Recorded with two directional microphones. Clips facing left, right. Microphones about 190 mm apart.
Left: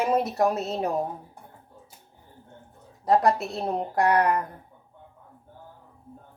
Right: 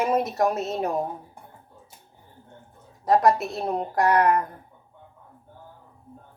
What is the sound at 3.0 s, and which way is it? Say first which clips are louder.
A woman's voice: right 2 dB; 30° left (ahead or behind).